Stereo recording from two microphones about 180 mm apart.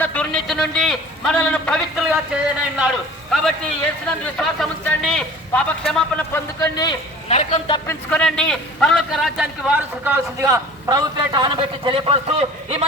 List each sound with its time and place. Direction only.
0.0 s a man's voice: 5° left (ahead or behind)
7.3 s a man's voice: 35° left (ahead or behind)
7.9 s a man's voice: 5° left (ahead or behind); by 12.8 s 35° right (ahead or behind)